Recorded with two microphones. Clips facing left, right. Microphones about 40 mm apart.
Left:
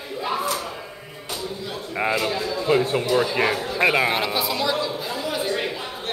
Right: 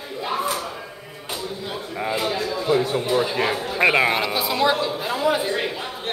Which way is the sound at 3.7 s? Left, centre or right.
Centre.